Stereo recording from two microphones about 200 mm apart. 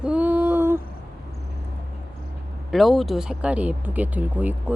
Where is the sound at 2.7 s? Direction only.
Centre (ahead or behind).